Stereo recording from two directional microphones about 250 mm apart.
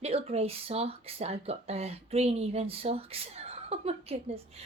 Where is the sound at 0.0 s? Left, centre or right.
Right.